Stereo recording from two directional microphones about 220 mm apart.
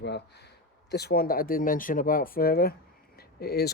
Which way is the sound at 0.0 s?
50° left (ahead or behind).